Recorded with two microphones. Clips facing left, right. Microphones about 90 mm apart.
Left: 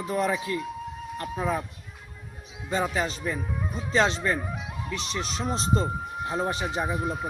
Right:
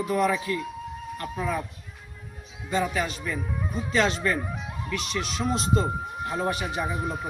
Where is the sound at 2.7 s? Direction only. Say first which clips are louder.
Even; 30° left (ahead or behind).